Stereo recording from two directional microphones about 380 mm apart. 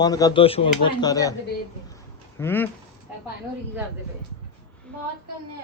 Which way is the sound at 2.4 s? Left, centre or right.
Centre.